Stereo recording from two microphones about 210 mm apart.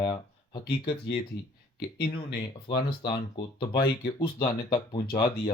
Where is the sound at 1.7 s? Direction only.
50° left (ahead or behind).